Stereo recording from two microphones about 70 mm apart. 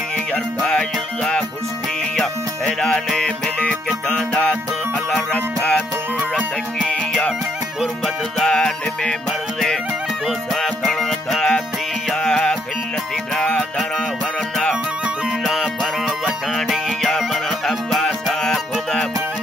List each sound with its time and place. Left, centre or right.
0.6 s music: centre
8.4 s music: centre
10.2 s music: centre
15.4 s music: centre